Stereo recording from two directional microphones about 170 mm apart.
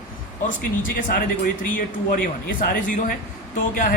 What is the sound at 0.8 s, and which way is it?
Speech, 55° left (ahead or behind).